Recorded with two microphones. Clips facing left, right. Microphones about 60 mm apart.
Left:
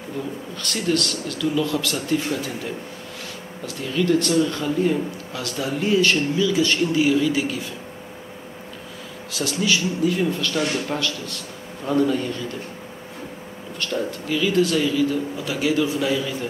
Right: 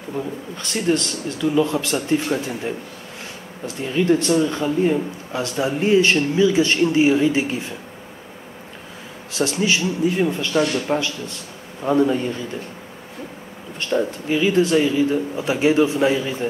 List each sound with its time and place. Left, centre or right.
0.6 s a man's voice: right
9.3 s a man's voice: right
13.7 s a man's voice: right